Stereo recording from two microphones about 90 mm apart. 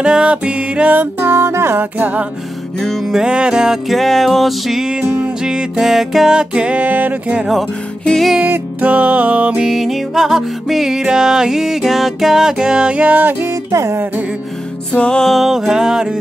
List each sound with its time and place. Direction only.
0.0 s music: 10° right (ahead or behind); by 1.9 s 30° right (ahead or behind)
2.0 s music: 15° right (ahead or behind)
2.8 s music: 5° left (ahead or behind)
3.2 s music: 10° right (ahead or behind)
8.0 s music: 10° left (ahead or behind)
8.4 s music: 15° right (ahead or behind)
9.7 s music: 5° right (ahead or behind); by 13.9 s 35° right (ahead or behind)
14.9 s music: 10° left (ahead or behind); by 16.2 s 5° right (ahead or behind)